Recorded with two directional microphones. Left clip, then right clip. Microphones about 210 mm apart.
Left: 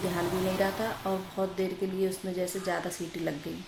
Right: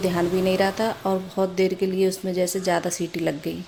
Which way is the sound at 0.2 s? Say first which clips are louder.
Right 7 dB; 45° right (ahead or behind).